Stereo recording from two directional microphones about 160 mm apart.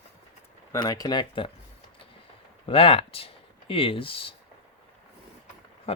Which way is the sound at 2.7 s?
35° left (ahead or behind).